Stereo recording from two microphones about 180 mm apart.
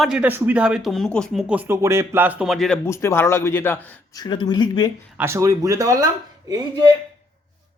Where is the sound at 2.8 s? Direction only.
15° left (ahead or behind).